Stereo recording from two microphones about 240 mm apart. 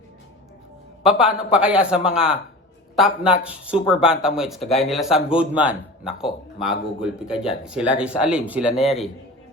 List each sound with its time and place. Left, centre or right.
1.0 s speech: centre